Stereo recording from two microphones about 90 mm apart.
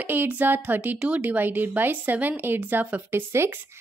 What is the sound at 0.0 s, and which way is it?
A woman's voice, 20° right (ahead or behind).